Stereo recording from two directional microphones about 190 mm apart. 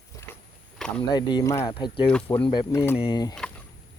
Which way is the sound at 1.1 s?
20° left (ahead or behind).